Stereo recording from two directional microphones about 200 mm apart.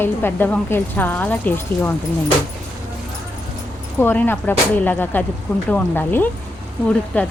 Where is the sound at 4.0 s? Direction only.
10° left (ahead or behind).